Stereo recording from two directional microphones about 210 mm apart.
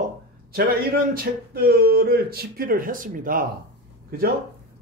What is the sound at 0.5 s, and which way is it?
Speech, 45° right (ahead or behind).